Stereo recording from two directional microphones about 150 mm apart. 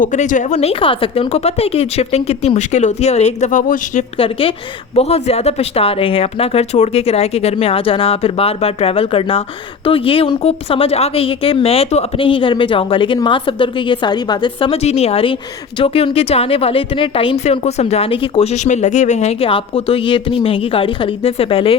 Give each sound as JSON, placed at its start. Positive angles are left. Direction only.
{"t": 0.0, "sound": "speech", "side_deg": 55}
{"t": 4.2, "sound": "speech", "side_deg": 35}